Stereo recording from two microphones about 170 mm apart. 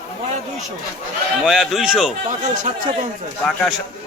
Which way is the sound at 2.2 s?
50° right (ahead or behind).